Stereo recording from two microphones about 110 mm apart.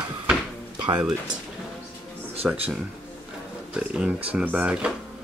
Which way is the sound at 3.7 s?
10° right (ahead or behind).